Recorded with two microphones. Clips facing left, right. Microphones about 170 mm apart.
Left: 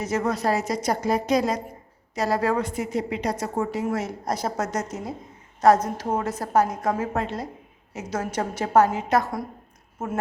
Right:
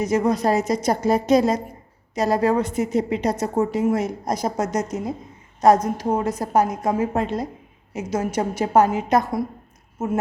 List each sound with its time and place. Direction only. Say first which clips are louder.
0.0 s a woman's voice: right 5 dB; 15° right (ahead or behind)